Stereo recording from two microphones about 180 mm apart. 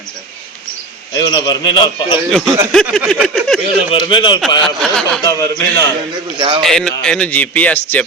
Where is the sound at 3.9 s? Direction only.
30° left (ahead or behind).